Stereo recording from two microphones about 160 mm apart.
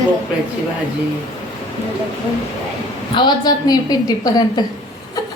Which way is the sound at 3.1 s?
25° left (ahead or behind).